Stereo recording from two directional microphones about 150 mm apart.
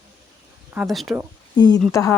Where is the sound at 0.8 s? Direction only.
Centre (ahead or behind).